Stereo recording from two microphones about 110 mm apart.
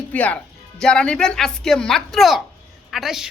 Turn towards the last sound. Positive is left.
turn(degrees=-5)  # may be behind; listen again after turning